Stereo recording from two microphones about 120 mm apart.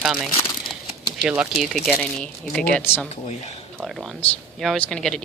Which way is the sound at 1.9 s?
5° left (ahead or behind).